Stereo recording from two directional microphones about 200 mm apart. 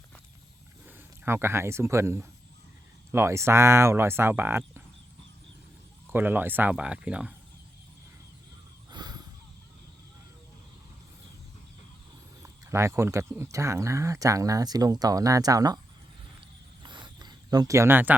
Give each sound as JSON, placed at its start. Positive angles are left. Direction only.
{"t": 0.9, "sound": "speech", "side_deg": -10}
{"t": 6.1, "sound": "speech", "side_deg": -10}
{"t": 8.9, "sound": "crow", "side_deg": -20}
{"t": 12.4, "sound": "speech", "side_deg": -15}
{"t": 16.8, "sound": "a sound", "side_deg": -20}